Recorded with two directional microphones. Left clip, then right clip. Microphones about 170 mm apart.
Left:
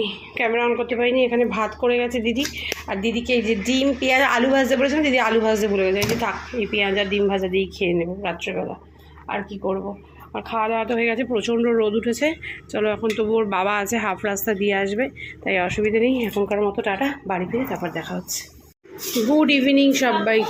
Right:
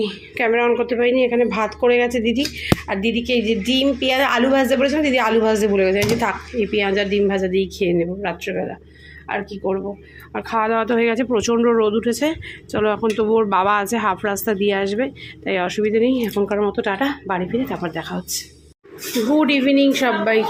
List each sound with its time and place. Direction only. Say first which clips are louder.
0.3 s a woman's voice: right 3 dB; 25° right (ahead or behind)
10.3 s a woman's voice: right 3 dB; 30° right (ahead or behind)
19.3 s speech: right 1 dB; centre (ahead or behind)